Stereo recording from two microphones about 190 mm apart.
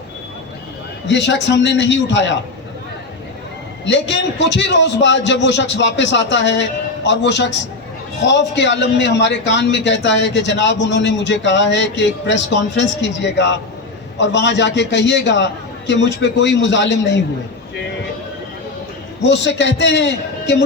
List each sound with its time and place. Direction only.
1.0 s a man's voice: 70° left (ahead or behind)
3.8 s a man's voice: 70° left (ahead or behind)
19.2 s a man's voice: 70° left (ahead or behind)